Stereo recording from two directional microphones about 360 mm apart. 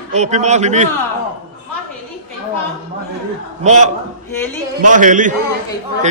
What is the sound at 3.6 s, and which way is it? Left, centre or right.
Speech, centre.